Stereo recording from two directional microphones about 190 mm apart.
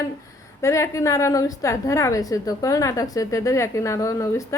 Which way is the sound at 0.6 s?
15° left (ahead or behind).